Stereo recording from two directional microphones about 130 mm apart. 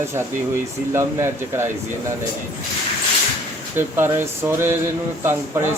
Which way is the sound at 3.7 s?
15° right (ahead or behind).